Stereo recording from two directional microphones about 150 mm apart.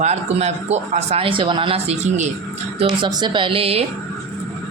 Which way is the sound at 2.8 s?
30° right (ahead or behind).